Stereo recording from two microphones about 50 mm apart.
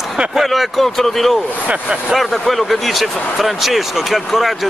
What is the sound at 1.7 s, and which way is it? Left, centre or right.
Speech, right.